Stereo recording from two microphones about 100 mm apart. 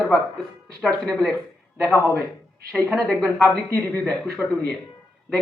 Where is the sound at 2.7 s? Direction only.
10° left (ahead or behind).